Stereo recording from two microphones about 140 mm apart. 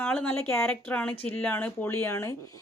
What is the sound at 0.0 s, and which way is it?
Speech, 10° left (ahead or behind).